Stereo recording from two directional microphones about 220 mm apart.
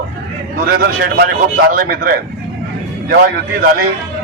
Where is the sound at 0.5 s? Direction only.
40° right (ahead or behind).